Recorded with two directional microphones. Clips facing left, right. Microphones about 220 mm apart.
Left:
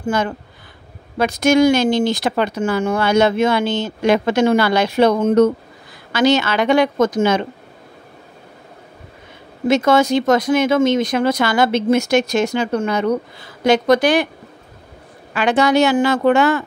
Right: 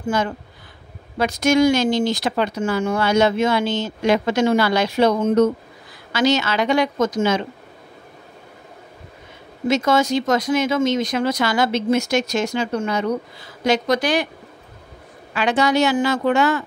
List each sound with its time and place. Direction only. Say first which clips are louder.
0.1 s speech: left 2 dB; 55° left (ahead or behind)
9.7 s speech: left 4 dB; 55° left (ahead or behind)
15.3 s speech: left 3 dB; 55° left (ahead or behind)